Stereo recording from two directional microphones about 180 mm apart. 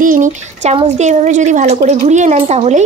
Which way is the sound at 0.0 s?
45° right (ahead or behind).